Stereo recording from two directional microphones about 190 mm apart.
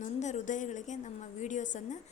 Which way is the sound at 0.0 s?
40° left (ahead or behind).